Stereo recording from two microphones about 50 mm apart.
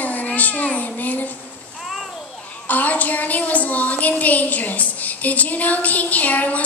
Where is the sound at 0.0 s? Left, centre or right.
Left.